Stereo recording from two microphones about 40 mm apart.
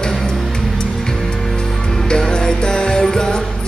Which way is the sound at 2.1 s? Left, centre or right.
Centre.